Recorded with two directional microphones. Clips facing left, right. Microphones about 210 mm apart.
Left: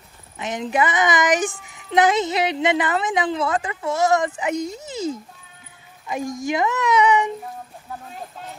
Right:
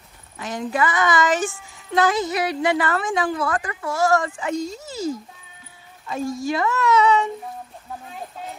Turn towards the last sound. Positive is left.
turn(degrees=15)  # may be behind; listen again after turning